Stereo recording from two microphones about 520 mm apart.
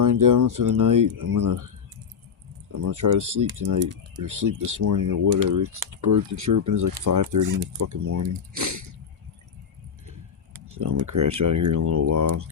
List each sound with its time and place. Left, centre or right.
0.0 s speech: right
2.7 s speech: right
10.7 s a sound: right
11.0 s speech: right